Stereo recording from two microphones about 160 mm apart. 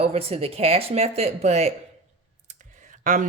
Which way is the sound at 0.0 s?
40° right (ahead or behind).